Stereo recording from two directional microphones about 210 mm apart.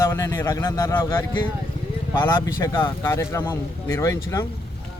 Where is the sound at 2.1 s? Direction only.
20° left (ahead or behind).